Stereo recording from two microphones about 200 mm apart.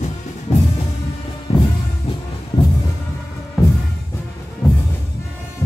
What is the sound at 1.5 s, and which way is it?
Music, 30° left (ahead or behind).